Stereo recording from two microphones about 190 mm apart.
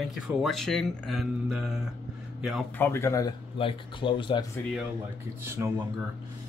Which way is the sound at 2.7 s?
10° left (ahead or behind).